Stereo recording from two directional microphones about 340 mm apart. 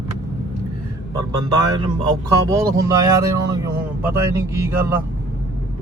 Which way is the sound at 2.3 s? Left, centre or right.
Centre.